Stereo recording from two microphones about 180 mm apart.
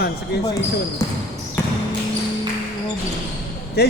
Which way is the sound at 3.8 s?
65° left (ahead or behind).